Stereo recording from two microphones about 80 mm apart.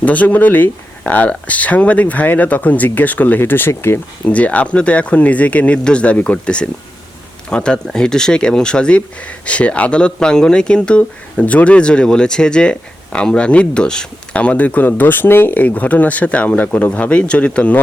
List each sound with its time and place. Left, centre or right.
0.0 s speech: centre
4.3 s speech: centre